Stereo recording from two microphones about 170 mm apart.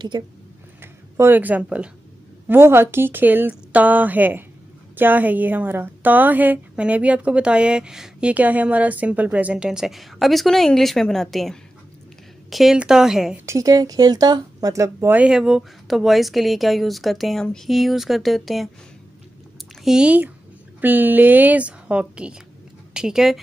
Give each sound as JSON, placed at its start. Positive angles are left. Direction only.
{"t": 0.1, "sound": "speech", "side_deg": -25}
{"t": 1.1, "sound": "a woman's voice", "side_deg": -10}
{"t": 13.5, "sound": "speech", "side_deg": -20}
{"t": 19.8, "sound": "a woman's voice", "side_deg": -5}